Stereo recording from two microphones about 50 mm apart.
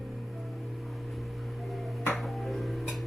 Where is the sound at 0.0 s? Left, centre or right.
Centre.